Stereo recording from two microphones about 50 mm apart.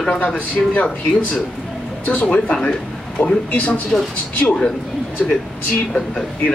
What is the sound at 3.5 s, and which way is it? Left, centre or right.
Speech, left.